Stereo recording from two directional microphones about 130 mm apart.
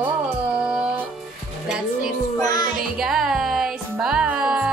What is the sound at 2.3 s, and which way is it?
Music, 30° left (ahead or behind).